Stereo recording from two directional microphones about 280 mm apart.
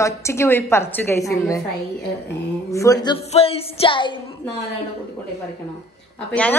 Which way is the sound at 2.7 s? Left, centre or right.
Centre.